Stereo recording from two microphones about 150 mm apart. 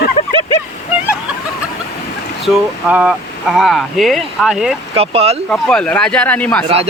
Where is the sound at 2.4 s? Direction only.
5° right (ahead or behind).